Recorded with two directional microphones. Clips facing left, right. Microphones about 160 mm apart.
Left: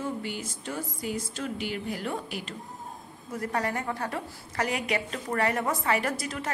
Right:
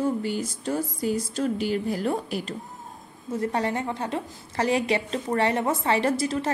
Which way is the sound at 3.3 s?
25° right (ahead or behind).